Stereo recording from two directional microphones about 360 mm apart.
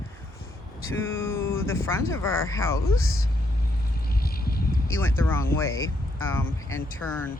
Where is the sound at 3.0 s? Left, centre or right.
Left.